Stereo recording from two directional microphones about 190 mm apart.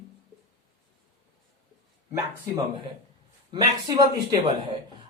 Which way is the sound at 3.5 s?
20° right (ahead or behind).